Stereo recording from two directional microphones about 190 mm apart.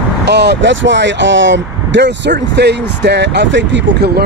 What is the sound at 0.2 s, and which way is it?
Speech, 65° right (ahead or behind).